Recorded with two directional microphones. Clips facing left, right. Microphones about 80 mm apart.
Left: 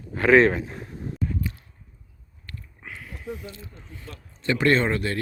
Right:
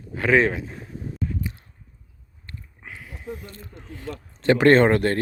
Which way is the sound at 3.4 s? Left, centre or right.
Right.